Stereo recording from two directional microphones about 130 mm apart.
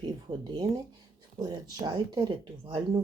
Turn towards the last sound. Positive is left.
turn(degrees=-40)  # may be behind; listen again after turning